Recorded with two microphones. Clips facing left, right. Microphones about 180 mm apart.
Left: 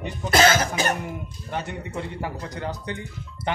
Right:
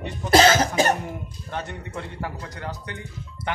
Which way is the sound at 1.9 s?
20° left (ahead or behind).